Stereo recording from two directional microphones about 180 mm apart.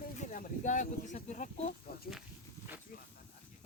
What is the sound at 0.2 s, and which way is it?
Speech, 45° left (ahead or behind).